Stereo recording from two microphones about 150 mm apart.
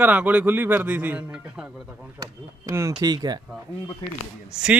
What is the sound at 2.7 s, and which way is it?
Speech, 20° right (ahead or behind).